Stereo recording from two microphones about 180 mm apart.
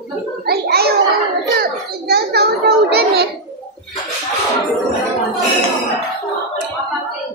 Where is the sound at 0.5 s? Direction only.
60° right (ahead or behind).